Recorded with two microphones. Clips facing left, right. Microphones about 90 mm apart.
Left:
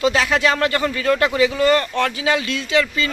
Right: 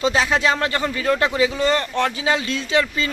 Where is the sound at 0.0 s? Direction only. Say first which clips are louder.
Left 1 dB; 25° right (ahead or behind).